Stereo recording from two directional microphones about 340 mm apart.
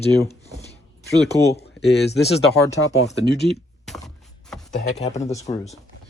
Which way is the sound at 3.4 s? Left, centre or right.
Centre.